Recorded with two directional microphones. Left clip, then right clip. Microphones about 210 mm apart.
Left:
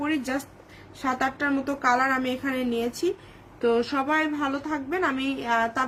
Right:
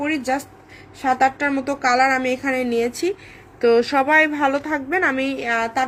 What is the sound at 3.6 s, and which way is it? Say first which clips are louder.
A woman's voice: right 8 dB; 10° right (ahead or behind).